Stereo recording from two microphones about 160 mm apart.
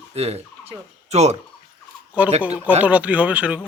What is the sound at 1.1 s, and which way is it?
Turkey, 45° right (ahead or behind).